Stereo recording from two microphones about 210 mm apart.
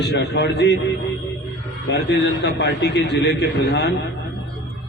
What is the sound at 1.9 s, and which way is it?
A man's voice, 55° left (ahead or behind).